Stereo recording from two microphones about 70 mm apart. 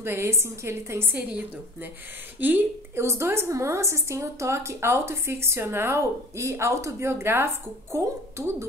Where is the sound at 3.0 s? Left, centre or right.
Right.